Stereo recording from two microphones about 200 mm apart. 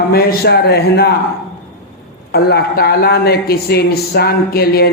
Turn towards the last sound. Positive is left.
turn(degrees=50)  # may be behind; listen again after turning